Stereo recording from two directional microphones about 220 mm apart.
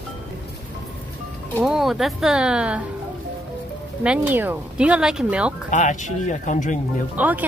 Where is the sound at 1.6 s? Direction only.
Centre (ahead or behind).